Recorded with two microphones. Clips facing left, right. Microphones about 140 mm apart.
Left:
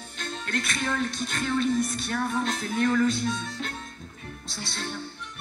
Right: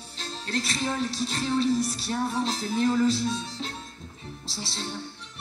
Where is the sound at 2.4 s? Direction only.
30° right (ahead or behind).